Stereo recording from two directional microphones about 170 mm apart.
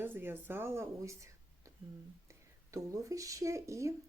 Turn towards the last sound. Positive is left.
turn(degrees=-15)  # may be behind; listen again after turning